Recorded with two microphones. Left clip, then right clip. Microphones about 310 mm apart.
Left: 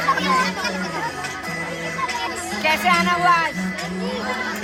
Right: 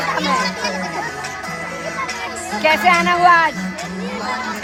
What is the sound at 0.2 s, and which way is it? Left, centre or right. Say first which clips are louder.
Children playing: right 1 dB; centre.